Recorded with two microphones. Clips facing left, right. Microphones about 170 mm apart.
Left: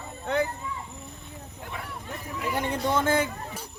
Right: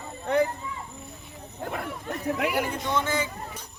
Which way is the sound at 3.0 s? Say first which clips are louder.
Left 3 dB; 55° left (ahead or behind).